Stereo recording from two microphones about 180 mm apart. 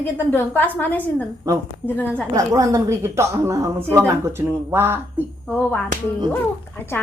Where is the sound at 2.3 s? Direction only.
20° right (ahead or behind).